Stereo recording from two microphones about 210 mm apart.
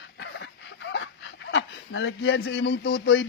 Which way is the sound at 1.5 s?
60° left (ahead or behind).